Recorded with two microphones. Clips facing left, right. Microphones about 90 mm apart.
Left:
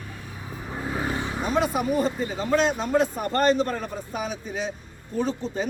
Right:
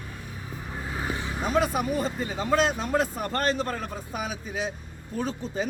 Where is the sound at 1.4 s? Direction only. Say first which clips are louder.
Even; centre (ahead or behind).